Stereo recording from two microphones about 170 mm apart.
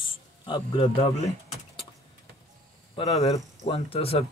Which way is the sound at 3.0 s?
35° left (ahead or behind).